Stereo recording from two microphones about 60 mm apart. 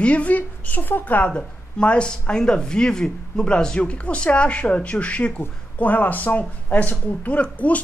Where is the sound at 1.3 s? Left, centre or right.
Centre.